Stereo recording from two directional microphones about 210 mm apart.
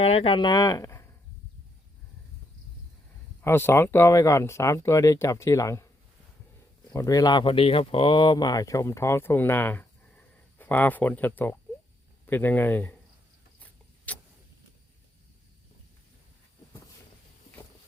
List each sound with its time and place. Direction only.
0.0 s speech: 30° left (ahead or behind)
3.4 s speech: 10° left (ahead or behind)
6.9 s a man's voice: 15° left (ahead or behind)
13.6 s vehicle: 5° left (ahead or behind)